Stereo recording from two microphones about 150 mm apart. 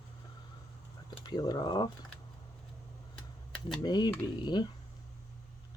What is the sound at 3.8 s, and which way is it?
Speech, 30° left (ahead or behind).